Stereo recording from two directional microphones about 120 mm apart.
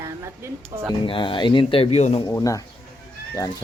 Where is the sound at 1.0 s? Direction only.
45° left (ahead or behind); by 2.1 s 65° left (ahead or behind).